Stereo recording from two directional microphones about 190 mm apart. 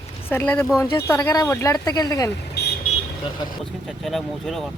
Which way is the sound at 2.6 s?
60° left (ahead or behind).